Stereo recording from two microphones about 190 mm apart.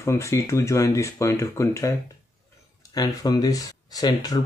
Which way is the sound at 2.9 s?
20° left (ahead or behind).